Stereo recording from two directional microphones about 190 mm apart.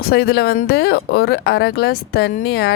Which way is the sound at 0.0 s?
55° left (ahead or behind).